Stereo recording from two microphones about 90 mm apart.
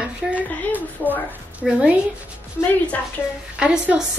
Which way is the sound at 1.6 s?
10° right (ahead or behind).